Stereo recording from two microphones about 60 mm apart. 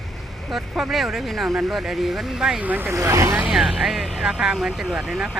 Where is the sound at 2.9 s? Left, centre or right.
Right.